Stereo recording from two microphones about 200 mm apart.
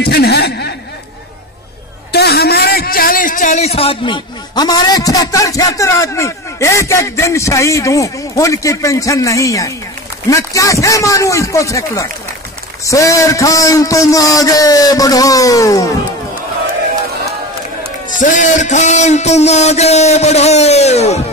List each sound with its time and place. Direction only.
0.0 s speech: 55° left (ahead or behind)
2.1 s a man's voice: 55° left (ahead or behind); by 15.9 s 15° left (ahead or behind)
18.0 s a man's voice: 40° left (ahead or behind)